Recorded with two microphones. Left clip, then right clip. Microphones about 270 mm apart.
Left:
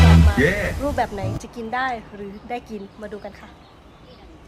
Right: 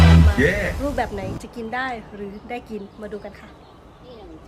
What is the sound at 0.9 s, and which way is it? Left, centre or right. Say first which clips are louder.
A woman's voice: left 1 dB; centre.